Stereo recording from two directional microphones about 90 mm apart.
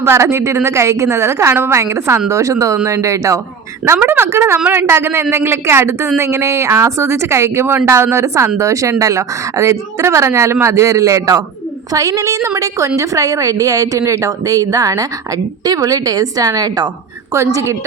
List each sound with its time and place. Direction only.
0.0 s a woman's voice: 30° right (ahead or behind)
3.9 s a woman's voice: 20° right (ahead or behind); by 16.9 s 45° right (ahead or behind)
17.3 s a woman's voice: 35° right (ahead or behind)